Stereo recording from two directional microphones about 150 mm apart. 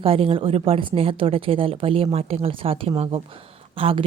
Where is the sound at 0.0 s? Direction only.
40° right (ahead or behind).